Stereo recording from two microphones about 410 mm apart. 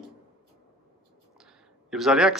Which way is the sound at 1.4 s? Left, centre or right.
Centre.